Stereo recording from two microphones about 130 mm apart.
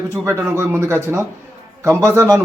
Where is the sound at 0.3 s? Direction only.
20° right (ahead or behind).